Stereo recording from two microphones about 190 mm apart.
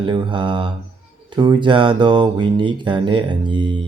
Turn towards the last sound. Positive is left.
turn(degrees=-25)  # may be behind; listen again after turning